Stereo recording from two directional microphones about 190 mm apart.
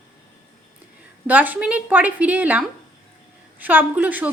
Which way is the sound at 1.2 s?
10° right (ahead or behind).